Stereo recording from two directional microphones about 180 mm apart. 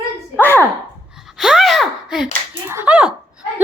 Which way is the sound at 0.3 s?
10° left (ahead or behind).